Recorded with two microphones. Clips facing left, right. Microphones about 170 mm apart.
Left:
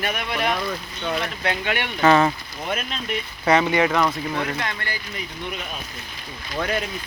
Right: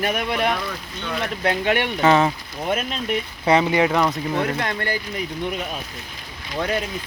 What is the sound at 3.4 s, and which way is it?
Speech, 25° right (ahead or behind).